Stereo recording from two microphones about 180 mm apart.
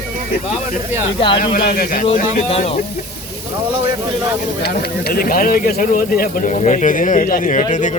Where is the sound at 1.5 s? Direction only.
55° left (ahead or behind).